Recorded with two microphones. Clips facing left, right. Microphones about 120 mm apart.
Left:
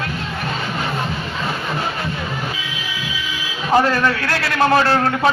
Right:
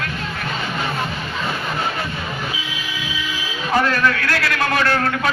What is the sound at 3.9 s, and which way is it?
A man's voice, 30° left (ahead or behind).